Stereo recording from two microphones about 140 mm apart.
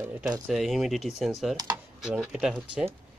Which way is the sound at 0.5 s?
Centre (ahead or behind).